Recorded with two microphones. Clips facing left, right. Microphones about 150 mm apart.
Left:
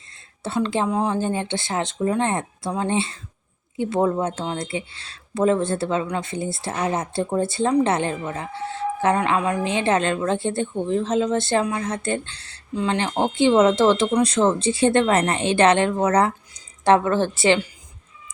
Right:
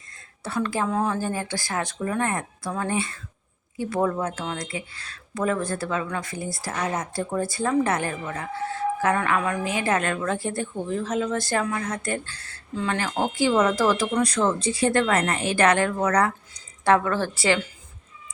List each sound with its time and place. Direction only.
0.4 s speech: 25° left (ahead or behind)